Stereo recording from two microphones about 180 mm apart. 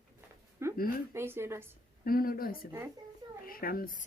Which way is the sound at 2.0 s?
55° left (ahead or behind).